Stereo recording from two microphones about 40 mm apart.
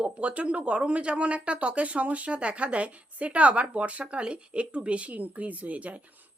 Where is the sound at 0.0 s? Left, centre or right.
Right.